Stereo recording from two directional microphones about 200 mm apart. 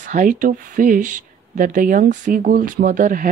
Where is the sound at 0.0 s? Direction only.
40° right (ahead or behind).